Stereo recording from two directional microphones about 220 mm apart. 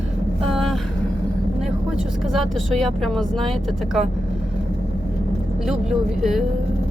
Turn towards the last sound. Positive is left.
turn(degrees=0)  # may be behind; listen again after turning